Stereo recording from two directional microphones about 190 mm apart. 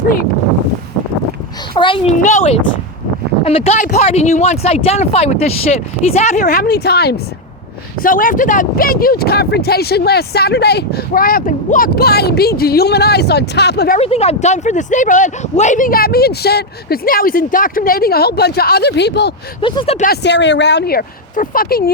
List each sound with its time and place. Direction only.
1.7 s speech: 25° left (ahead or behind)
2.2 s speech: 40° left (ahead or behind); by 7.2 s 55° left (ahead or behind)
8.0 s speech: 45° left (ahead or behind)
14.0 s speech: 35° left (ahead or behind); by 19.3 s 60° left (ahead or behind)
19.6 s speech: 25° left (ahead or behind)
20.0 s speech: 60° left (ahead or behind)